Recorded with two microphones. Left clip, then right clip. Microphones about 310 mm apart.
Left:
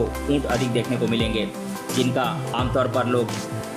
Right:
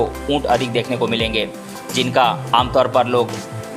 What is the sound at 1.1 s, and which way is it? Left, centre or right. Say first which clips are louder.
Speech: right 5 dB; centre.